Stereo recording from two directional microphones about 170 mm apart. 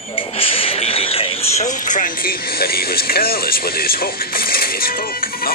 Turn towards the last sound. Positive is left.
turn(degrees=60)  # may be behind; listen again after turning